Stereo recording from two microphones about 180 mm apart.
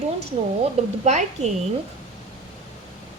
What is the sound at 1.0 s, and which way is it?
Speech, 40° right (ahead or behind).